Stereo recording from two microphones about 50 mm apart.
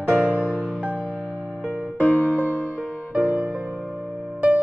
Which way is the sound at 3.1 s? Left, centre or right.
Right.